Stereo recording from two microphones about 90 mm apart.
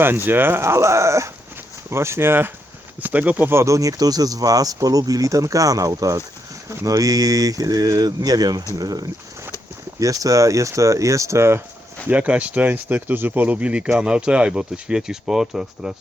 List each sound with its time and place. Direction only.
0.3 s speech: 25° right (ahead or behind)
12.0 s speech: 15° right (ahead or behind)